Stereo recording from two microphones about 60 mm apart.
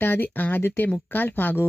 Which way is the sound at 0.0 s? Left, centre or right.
Left.